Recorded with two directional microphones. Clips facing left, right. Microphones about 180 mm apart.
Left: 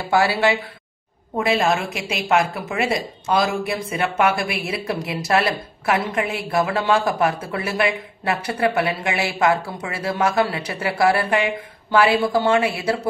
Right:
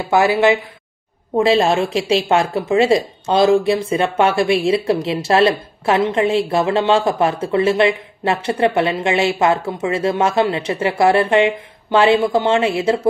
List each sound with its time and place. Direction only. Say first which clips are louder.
0.1 s a woman's voice: right 5 dB; 20° right (ahead or behind)